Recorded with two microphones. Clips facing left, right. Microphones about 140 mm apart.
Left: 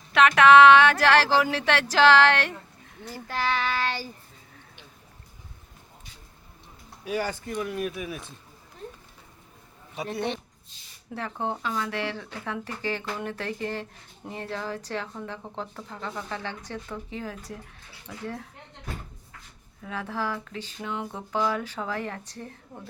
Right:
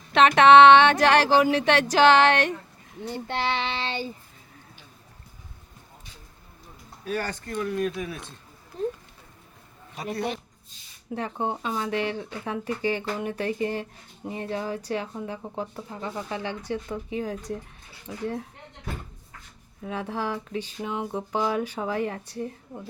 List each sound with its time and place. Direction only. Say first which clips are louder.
0.1 s speech: right 2 dB; 25° right (ahead or behind)
7.0 s speech: left 1 dB; 10° left (ahead or behind)
9.9 s speech: even; centre (ahead or behind)
11.1 s speech: right 2 dB; 20° right (ahead or behind)
19.8 s speech: right 2 dB; 20° right (ahead or behind)